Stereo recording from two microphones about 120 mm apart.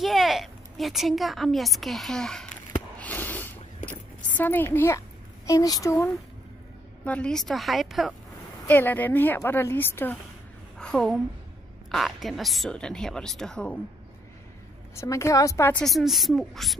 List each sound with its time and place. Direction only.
0.0 s a woman's voice: centre (ahead or behind)
3.0 s a sound: 15° left (ahead or behind)
4.3 s a woman's voice: 15° left (ahead or behind)
5.5 s a woman's voice: 30° left (ahead or behind)
7.1 s a woman's voice: 10° left (ahead or behind)
8.6 s a woman's voice: 15° left (ahead or behind)
10.8 s a woman's voice: 5° left (ahead or behind)
15.0 s a woman's voice: 25° left (ahead or behind)
15.8 s a woman's voice: centre (ahead or behind)